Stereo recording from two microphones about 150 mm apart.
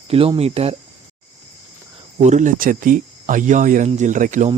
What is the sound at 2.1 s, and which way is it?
Speech, 50° right (ahead or behind).